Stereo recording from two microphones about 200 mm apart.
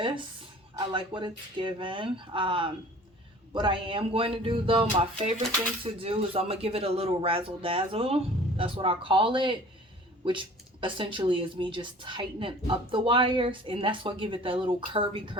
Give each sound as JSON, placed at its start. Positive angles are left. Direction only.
{"t": 0.8, "sound": "speech", "side_deg": -25}